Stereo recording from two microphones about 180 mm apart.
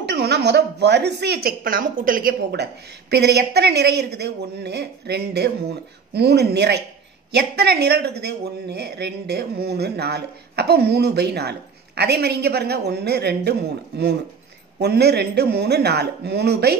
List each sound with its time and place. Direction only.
0.0 s speech: 70° right (ahead or behind)